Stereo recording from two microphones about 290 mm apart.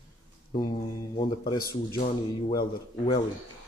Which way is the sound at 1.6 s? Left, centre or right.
Left.